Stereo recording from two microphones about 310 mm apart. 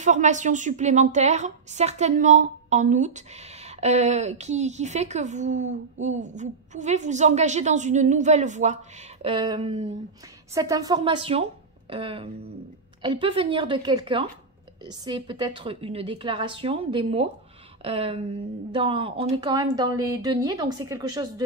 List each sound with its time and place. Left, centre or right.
0.0 s a woman's voice: right